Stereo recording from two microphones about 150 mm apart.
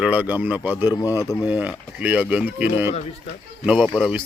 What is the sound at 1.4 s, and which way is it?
Speech, 10° right (ahead or behind).